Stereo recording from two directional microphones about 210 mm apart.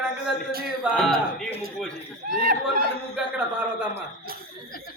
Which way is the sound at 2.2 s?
45° right (ahead or behind).